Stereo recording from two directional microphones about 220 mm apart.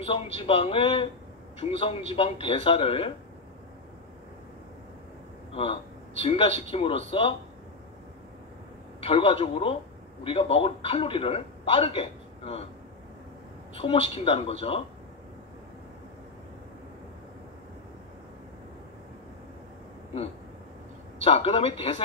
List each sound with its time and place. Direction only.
0.0 s a man's voice: 25° left (ahead or behind)
5.5 s a man's voice: 25° left (ahead or behind)
9.0 s a man's voice: 25° left (ahead or behind)
13.7 s a man's voice: 25° left (ahead or behind)
21.2 s a man's voice: 25° left (ahead or behind)